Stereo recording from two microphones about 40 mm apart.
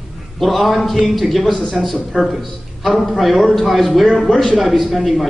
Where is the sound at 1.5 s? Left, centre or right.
Centre.